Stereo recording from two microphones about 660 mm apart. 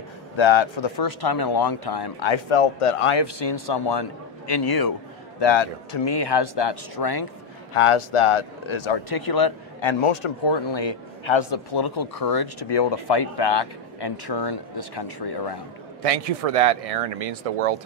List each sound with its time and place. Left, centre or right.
0.4 s a man's voice: left
3.2 s speech: left
7.7 s speech: left
16.0 s speech: right